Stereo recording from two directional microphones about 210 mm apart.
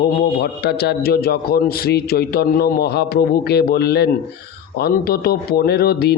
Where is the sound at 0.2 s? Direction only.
50° left (ahead or behind).